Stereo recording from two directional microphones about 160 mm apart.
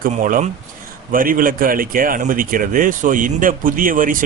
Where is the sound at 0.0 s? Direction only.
55° right (ahead or behind).